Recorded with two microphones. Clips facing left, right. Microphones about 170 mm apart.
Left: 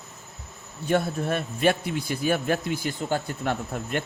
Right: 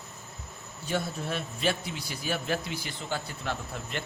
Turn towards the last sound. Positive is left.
turn(degrees=55)  # may be behind; listen again after turning